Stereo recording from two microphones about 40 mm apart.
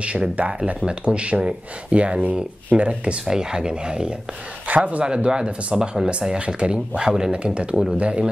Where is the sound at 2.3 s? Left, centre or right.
Right.